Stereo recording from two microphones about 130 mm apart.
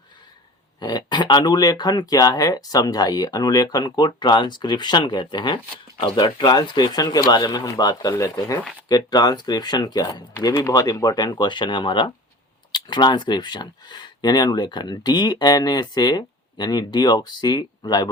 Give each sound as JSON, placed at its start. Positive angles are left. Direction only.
{"t": 0.8, "sound": "speech", "side_deg": 35}